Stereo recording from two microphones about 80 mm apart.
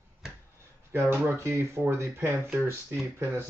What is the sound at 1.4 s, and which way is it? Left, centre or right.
A man's voice, right.